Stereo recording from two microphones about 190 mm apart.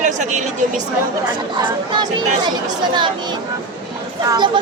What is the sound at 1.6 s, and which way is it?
Speech, 25° right (ahead or behind).